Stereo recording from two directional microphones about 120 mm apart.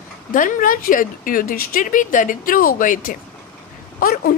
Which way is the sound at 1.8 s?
90° left.